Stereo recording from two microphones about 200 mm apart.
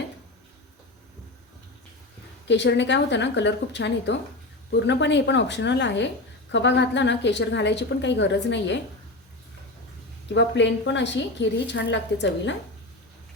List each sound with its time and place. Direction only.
2.5 s a woman's voice: 60° left (ahead or behind)
10.3 s a woman's voice: 60° left (ahead or behind)